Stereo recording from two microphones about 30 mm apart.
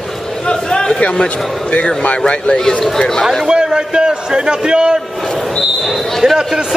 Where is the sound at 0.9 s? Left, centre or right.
Left.